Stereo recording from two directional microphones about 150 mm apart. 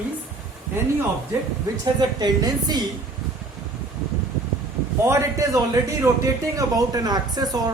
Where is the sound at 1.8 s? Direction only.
25° right (ahead or behind).